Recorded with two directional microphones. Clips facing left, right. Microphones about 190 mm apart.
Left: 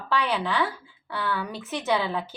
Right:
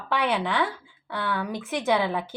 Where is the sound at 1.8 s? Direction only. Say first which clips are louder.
Right 1 dB; 15° right (ahead or behind).